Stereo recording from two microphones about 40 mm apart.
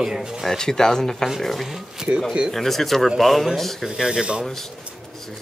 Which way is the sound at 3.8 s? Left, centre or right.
Centre.